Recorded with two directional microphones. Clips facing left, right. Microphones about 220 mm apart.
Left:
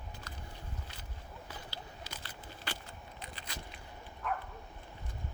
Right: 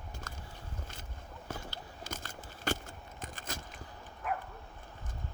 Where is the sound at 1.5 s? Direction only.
45° right (ahead or behind).